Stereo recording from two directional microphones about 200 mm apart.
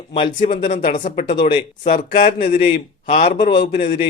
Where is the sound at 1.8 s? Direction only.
45° left (ahead or behind).